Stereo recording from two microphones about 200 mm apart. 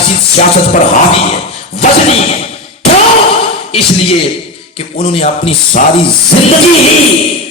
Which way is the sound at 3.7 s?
30° left (ahead or behind).